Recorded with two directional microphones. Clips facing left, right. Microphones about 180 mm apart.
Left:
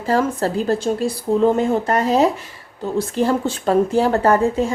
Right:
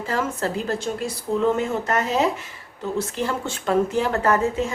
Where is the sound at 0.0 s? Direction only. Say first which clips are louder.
Left 6 dB; 35° left (ahead or behind).